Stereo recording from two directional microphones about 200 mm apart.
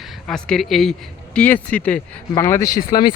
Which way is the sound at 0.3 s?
5° left (ahead or behind).